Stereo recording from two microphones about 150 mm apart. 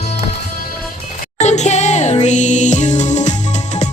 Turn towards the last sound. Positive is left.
turn(degrees=50)  # may be behind; listen again after turning